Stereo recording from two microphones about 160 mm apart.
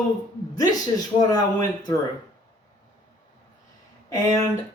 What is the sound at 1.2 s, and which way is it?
Speech, 25° left (ahead or behind).